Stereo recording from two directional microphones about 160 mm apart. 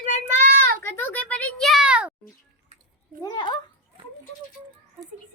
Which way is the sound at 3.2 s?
30° left (ahead or behind).